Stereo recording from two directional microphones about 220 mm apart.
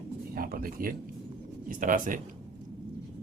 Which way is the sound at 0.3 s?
40° right (ahead or behind).